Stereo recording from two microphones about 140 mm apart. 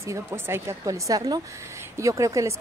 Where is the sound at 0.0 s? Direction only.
20° right (ahead or behind).